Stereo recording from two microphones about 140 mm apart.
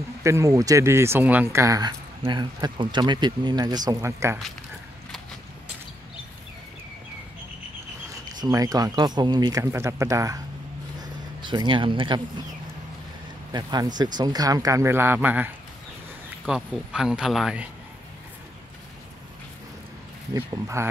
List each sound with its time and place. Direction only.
0.2 s speech: 20° right (ahead or behind)
8.4 s speech: 25° right (ahead or behind)
11.0 s a sound: 35° right (ahead or behind)
13.5 s speech: 30° right (ahead or behind); by 17.6 s 5° right (ahead or behind)
20.8 s speech: 20° right (ahead or behind)